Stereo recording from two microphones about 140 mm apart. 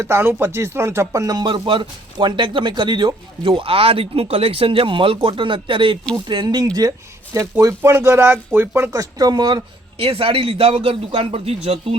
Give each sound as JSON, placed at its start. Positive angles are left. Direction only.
{"t": 0.0, "sound": "speech", "side_deg": -15}
{"t": 7.3, "sound": "speech", "side_deg": -20}